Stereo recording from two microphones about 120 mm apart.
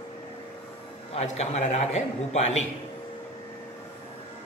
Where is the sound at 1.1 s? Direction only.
65° left (ahead or behind).